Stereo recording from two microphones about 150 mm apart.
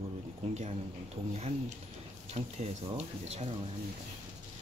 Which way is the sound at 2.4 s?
50° right (ahead or behind).